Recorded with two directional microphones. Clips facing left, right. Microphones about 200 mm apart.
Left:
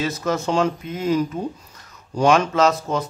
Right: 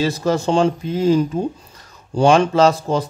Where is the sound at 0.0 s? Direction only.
30° right (ahead or behind).